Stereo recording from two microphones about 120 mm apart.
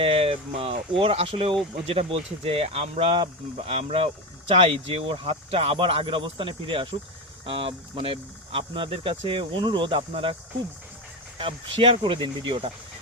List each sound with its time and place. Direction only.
0.0 s speech: 50° right (ahead or behind)
11.3 s speech: 45° right (ahead or behind)